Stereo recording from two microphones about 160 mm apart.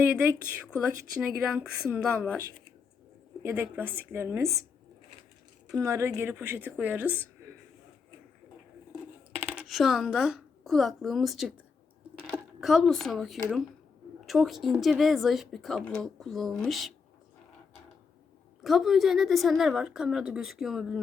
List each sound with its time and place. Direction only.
0.0 s speech: 10° right (ahead or behind)
5.6 s speech: 20° right (ahead or behind)
9.3 s speech: 10° right (ahead or behind)
18.6 s speech: centre (ahead or behind)